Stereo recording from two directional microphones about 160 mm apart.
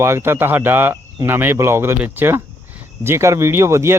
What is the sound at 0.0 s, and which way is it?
Speech, 15° right (ahead or behind).